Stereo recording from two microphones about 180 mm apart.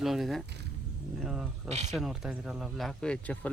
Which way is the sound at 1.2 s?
Centre (ahead or behind).